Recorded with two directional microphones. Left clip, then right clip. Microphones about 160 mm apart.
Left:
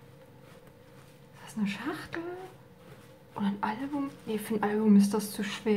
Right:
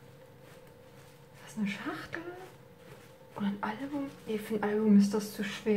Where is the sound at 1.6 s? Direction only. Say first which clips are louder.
Left 2 dB; 20° left (ahead or behind).